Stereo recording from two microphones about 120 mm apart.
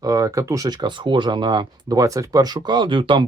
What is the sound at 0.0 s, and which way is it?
Speech, 30° right (ahead or behind).